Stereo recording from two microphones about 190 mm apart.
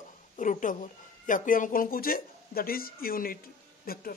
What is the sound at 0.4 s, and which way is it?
A man's voice, 40° left (ahead or behind).